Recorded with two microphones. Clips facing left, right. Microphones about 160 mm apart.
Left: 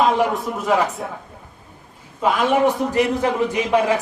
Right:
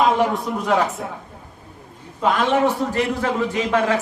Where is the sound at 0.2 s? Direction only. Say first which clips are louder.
Even; centre (ahead or behind).